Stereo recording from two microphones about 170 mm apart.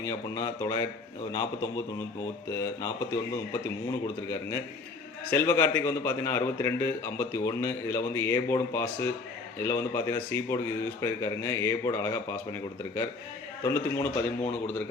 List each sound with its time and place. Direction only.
0.0 s a man's voice: 20° left (ahead or behind)
5.3 s a man's voice: 15° left (ahead or behind)